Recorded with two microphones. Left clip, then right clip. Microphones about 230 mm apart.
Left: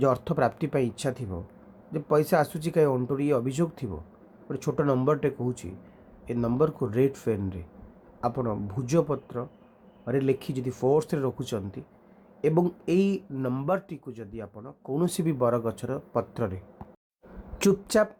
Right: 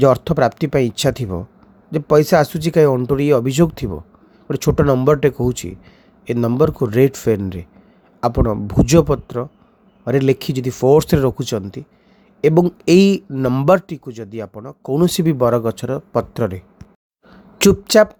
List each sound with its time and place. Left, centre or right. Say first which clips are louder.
0.0 s speech: right 11 dB; right